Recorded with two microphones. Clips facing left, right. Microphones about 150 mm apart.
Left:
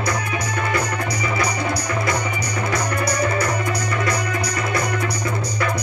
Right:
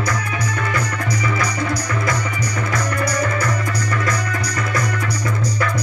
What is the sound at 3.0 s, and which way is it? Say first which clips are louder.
Music: even; 25° left (ahead or behind).